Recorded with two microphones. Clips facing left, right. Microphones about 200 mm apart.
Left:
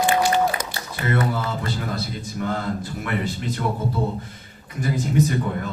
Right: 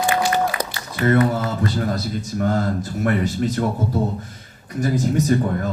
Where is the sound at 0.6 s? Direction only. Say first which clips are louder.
Right 7 dB; 45° right (ahead or behind).